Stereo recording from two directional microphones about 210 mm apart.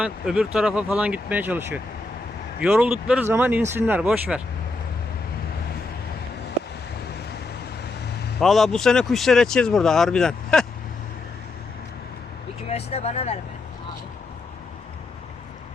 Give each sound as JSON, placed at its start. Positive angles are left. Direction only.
{"t": 0.0, "sound": "speech", "side_deg": -5}
{"t": 8.4, "sound": "speech", "side_deg": 0}
{"t": 12.6, "sound": "speech", "side_deg": 30}